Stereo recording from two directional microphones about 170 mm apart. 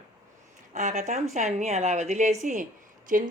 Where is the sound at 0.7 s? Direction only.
45° right (ahead or behind).